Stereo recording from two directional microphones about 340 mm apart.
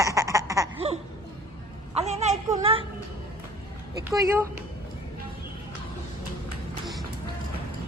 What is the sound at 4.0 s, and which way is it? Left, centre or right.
Speech, centre.